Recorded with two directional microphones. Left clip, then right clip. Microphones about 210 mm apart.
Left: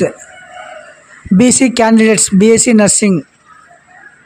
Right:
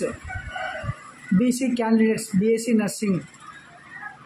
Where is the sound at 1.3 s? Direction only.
50° left (ahead or behind).